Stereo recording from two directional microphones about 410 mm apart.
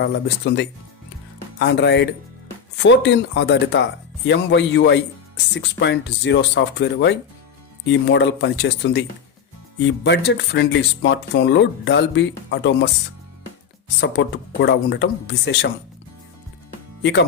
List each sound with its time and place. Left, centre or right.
0.0 s speech: left
14.0 s speech: left
17.0 s speech: left